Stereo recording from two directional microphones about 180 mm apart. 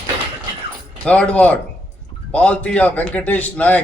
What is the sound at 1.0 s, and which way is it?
A man's voice, 5° left (ahead or behind).